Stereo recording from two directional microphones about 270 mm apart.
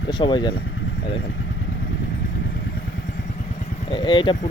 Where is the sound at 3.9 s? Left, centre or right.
Centre.